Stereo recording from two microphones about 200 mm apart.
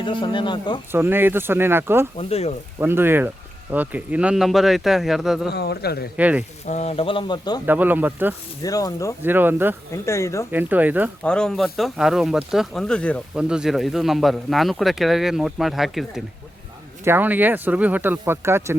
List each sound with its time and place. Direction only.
0.0 s speech: 25° left (ahead or behind)
0.9 s speech: 10° right (ahead or behind)
2.1 s speech: 30° left (ahead or behind)
2.7 s speech: 10° right (ahead or behind)
5.5 s speech: 55° left (ahead or behind)
6.1 s speech: 5° right (ahead or behind)
6.7 s speech: 35° left (ahead or behind)
7.6 s speech: 10° right (ahead or behind)
8.6 s speech: 15° left (ahead or behind)
9.2 s speech: 10° right (ahead or behind)
10.1 s speech: 15° left (ahead or behind)
10.5 s speech: 10° right (ahead or behind)
11.2 s speech: 5° left (ahead or behind); by 18.8 s 10° right (ahead or behind)